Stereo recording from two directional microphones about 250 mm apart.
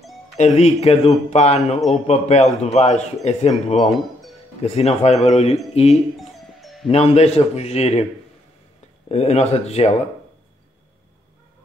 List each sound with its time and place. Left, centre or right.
0.4 s a man's voice: left
6.1 s music: centre
6.9 s a man's voice: left
9.1 s a man's voice: left